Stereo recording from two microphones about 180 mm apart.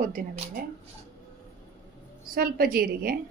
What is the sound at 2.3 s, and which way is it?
Speech, 55° right (ahead or behind).